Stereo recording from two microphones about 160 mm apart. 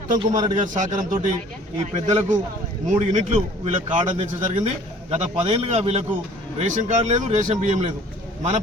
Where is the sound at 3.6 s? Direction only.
45° right (ahead or behind).